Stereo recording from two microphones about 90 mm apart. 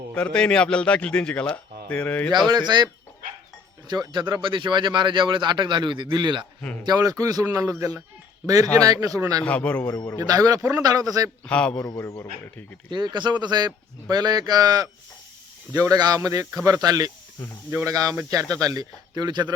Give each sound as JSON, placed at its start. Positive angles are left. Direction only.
{"t": 0.1, "sound": "a man's voice", "side_deg": 10}
{"t": 2.3, "sound": "speech", "side_deg": -55}
{"t": 6.6, "sound": "speech", "side_deg": 15}
{"t": 6.8, "sound": "a man's voice", "side_deg": -45}
{"t": 9.4, "sound": "a man's voice", "side_deg": 15}
{"t": 10.2, "sound": "speech", "side_deg": -45}
{"t": 11.4, "sound": "a man's voice", "side_deg": 10}
{"t": 11.8, "sound": "a man's voice", "side_deg": 35}
{"t": 12.9, "sound": "a man's voice", "side_deg": -55}